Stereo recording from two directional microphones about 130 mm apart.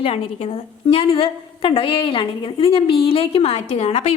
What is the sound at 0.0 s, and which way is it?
A woman's voice, 45° left (ahead or behind).